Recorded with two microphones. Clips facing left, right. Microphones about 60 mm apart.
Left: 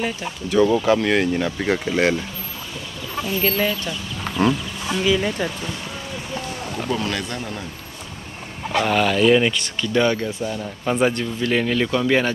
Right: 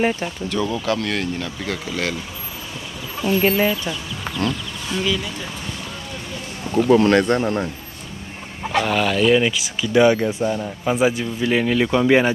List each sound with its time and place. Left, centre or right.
0.5 s speech: centre
3.3 s speech: right
4.3 s a sound: centre
6.9 s speech: right
8.7 s speech: centre